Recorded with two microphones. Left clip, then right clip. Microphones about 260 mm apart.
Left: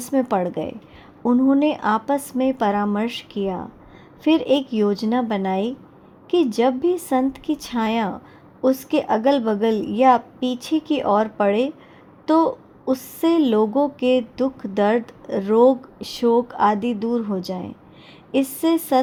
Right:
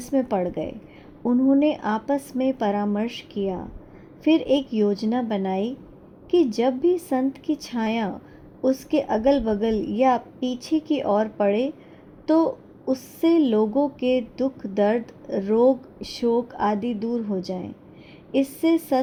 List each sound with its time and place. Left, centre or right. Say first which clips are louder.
0.0 s a woman's voice: left 3 dB; left